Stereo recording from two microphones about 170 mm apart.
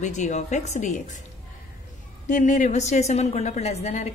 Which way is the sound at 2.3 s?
45° left (ahead or behind).